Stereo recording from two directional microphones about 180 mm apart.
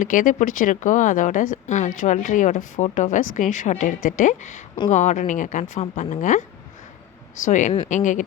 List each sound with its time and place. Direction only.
0.0 s speech: 45° left (ahead or behind)
7.4 s speech: 45° left (ahead or behind)